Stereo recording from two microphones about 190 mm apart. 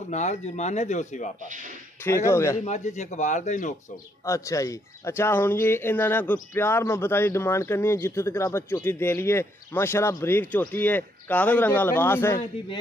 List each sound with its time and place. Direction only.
0.1 s speech: 40° left (ahead or behind)
2.0 s speech: 15° left (ahead or behind)
2.6 s speech: 35° left (ahead or behind)
4.2 s speech: 15° left (ahead or behind)